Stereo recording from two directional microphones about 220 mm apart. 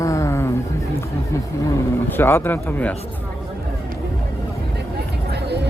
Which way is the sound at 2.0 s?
10° left (ahead or behind).